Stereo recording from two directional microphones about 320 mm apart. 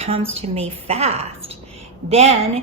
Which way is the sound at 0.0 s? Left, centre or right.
Centre.